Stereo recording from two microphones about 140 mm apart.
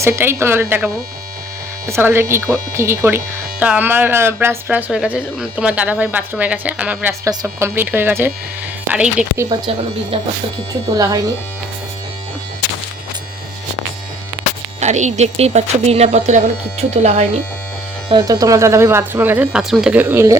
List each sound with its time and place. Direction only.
0.0 s speech: 20° right (ahead or behind)
1.9 s speech: 15° right (ahead or behind)
9.5 s speech: 30° right (ahead or behind)
10.9 s speech: 25° right (ahead or behind)
14.8 s speech: 55° right (ahead or behind)
18.2 s speech: 25° right (ahead or behind)